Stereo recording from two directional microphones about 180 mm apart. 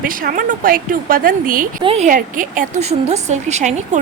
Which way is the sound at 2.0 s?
45° right (ahead or behind).